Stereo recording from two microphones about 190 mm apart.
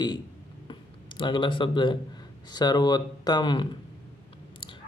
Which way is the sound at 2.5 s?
20° left (ahead or behind).